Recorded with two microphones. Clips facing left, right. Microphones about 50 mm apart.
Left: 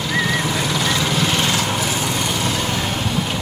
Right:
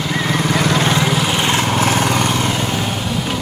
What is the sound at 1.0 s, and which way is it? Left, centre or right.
Lawn mower, centre.